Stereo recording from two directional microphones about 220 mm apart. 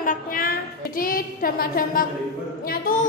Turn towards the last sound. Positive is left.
turn(degrees=40)  # may be behind; listen again after turning